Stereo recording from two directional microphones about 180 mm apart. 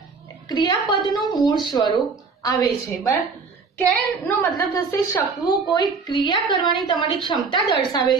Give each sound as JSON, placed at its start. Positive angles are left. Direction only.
{"t": 0.5, "sound": "a woman's voice", "side_deg": 25}
{"t": 4.4, "sound": "a woman's voice", "side_deg": 15}